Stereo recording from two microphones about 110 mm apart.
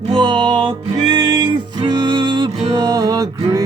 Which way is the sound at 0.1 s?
50° right (ahead or behind).